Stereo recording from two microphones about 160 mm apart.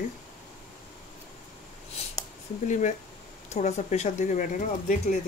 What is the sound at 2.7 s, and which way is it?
Speech, 50° left (ahead or behind).